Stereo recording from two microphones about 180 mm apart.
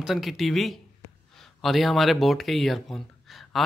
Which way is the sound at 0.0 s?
Centre (ahead or behind).